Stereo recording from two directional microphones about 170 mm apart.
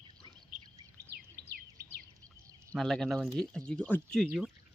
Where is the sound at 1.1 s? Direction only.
70° right (ahead or behind).